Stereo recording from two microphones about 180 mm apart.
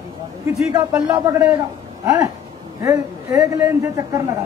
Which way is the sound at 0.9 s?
15° right (ahead or behind).